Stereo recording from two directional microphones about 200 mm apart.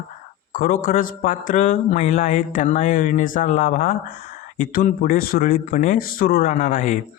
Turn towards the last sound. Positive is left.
turn(degrees=40)  # may be behind; listen again after turning